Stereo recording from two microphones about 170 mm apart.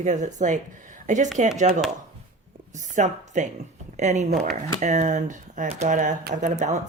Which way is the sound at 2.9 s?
45° right (ahead or behind).